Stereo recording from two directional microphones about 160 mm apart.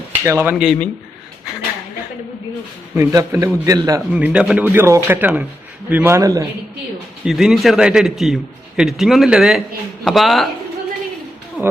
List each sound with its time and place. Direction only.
0.1 s speech: 15° right (ahead or behind)
0.5 s a man's voice: centre (ahead or behind)
2.9 s a man's voice: 20° right (ahead or behind)
4.1 s speech: 5° right (ahead or behind)
7.3 s a man's voice: centre (ahead or behind)
11.6 s music: 5° right (ahead or behind)